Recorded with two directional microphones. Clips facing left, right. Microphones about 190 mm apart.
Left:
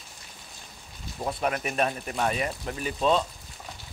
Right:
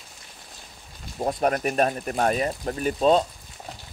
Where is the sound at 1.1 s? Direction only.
40° right (ahead or behind).